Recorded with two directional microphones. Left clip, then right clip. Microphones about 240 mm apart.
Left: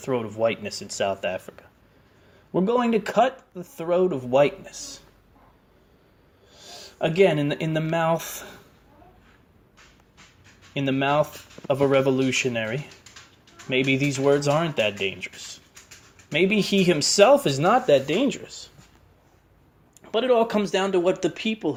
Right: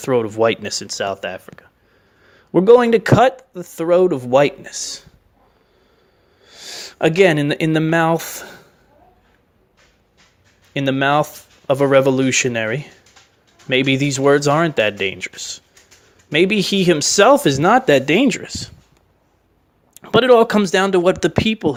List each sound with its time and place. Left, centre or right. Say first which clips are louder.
0.0 s speech: right 8 dB; right
2.5 s speech: right 12 dB; right
6.5 s speech: right 10 dB; right
10.8 s speech: right 6 dB; right
19.9 s speech: right 10 dB; right